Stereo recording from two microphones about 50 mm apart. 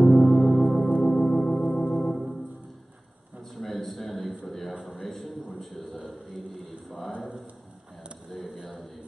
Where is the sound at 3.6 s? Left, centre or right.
Centre.